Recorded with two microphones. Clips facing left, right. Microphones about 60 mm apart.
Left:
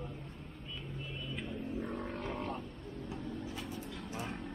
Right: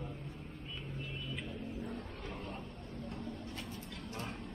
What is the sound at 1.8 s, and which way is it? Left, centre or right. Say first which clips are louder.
Vehicle: left 5 dB; left.